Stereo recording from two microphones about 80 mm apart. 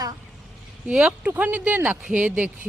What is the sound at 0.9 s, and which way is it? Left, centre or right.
A woman's voice, centre.